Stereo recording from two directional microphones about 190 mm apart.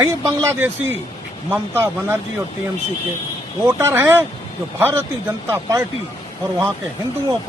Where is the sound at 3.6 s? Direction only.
15° right (ahead or behind).